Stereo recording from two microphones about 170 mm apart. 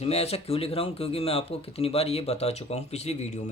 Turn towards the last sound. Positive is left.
turn(degrees=40)  # may be behind; listen again after turning